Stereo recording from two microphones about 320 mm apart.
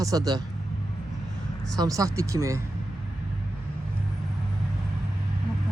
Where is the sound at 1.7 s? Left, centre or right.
Centre.